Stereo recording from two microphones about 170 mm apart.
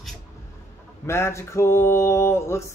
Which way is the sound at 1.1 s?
15° left (ahead or behind).